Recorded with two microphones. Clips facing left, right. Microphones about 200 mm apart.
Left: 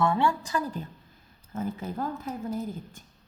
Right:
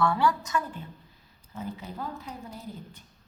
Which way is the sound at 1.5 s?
50° left (ahead or behind).